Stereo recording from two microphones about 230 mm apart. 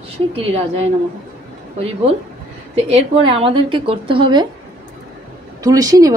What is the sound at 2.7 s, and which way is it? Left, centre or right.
A woman's voice, right.